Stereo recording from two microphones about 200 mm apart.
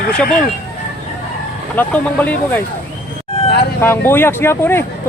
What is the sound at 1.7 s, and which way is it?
Speech, 10° left (ahead or behind).